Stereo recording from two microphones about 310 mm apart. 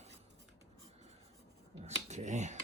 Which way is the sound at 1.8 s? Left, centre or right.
Right.